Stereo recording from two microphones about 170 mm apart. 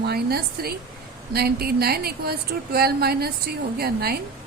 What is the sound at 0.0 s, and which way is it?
A woman's voice, 70° right (ahead or behind).